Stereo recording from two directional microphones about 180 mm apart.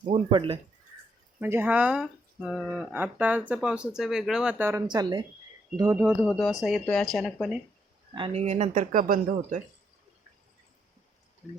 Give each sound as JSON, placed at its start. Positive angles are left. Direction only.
{"t": 0.1, "sound": "speech", "side_deg": -30}
{"t": 1.4, "sound": "speech", "side_deg": -10}
{"t": 4.9, "sound": "speech", "side_deg": -25}
{"t": 6.3, "sound": "speech", "side_deg": 0}
{"t": 8.1, "sound": "speech", "side_deg": -30}